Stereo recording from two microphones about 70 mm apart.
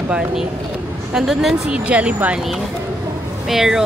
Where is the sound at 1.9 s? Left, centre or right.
Centre.